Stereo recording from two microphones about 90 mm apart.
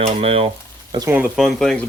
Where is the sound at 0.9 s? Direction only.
65° right (ahead or behind).